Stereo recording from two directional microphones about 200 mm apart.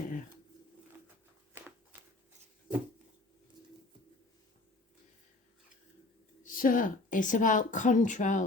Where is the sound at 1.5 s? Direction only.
10° right (ahead or behind).